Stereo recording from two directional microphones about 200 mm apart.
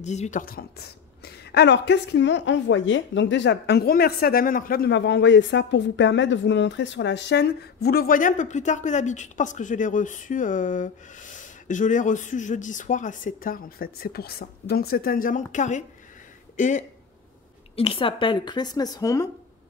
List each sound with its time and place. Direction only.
0.0 s a woman's voice: 35° left (ahead or behind); by 19.2 s 20° left (ahead or behind)